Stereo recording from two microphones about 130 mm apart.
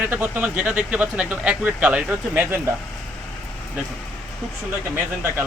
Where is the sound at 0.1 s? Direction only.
10° right (ahead or behind).